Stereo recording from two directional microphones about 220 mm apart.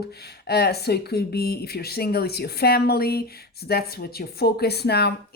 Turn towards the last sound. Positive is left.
turn(degrees=50)  # may be behind; listen again after turning